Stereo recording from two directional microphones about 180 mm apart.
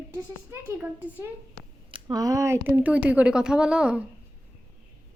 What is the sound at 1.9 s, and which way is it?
Speech, 25° right (ahead or behind).